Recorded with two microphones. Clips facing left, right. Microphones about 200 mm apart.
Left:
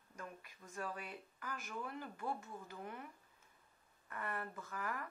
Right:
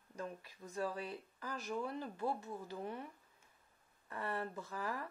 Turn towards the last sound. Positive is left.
turn(degrees=-30)  # may be behind; listen again after turning